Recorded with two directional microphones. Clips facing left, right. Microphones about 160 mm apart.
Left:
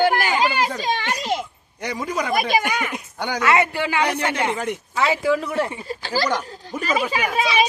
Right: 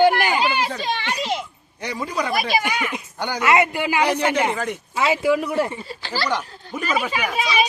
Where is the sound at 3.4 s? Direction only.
15° right (ahead or behind).